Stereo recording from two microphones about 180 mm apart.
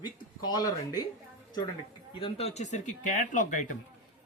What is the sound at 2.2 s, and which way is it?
Speech, 35° left (ahead or behind).